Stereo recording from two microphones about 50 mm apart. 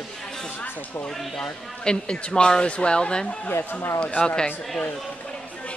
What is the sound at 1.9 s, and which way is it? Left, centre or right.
Speech, left.